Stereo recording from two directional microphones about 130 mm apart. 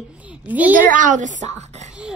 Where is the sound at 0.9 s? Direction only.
80° right; by 1.9 s 60° right (ahead or behind).